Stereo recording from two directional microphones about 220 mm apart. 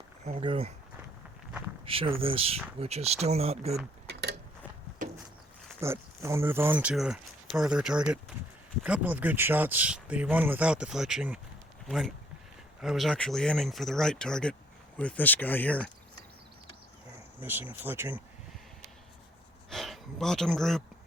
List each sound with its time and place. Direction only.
0.3 s speech: 25° right (ahead or behind)
1.8 s speech: 25° right (ahead or behind)
4.0 s a sound: 50° right (ahead or behind)
5.8 s speech: 10° right (ahead or behind); by 15.9 s 5° left (ahead or behind)
17.4 s speech: 10° right (ahead or behind)
19.7 s a sound: centre (ahead or behind)